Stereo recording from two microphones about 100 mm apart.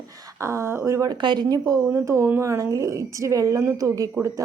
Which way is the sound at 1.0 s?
50° right (ahead or behind).